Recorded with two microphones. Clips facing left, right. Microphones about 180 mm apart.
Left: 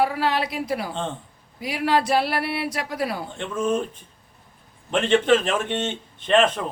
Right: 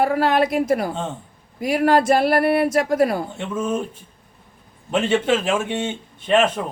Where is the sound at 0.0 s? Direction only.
50° right (ahead or behind).